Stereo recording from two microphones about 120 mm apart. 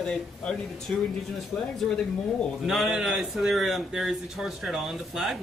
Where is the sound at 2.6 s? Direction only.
Centre (ahead or behind).